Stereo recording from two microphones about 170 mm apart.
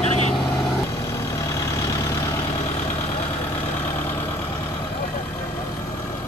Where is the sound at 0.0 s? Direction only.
40° left (ahead or behind).